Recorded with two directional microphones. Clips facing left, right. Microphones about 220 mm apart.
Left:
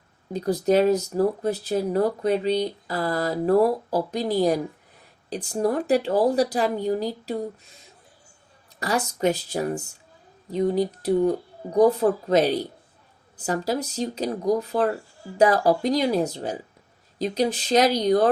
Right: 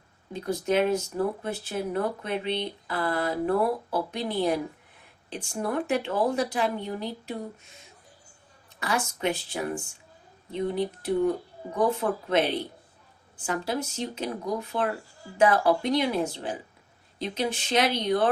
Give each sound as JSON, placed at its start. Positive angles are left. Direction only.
{"t": 0.3, "sound": "speech", "side_deg": 35}
{"t": 8.8, "sound": "speech", "side_deg": 40}